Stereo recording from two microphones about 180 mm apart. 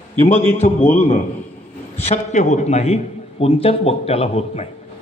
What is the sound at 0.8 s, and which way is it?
Speech, 10° left (ahead or behind).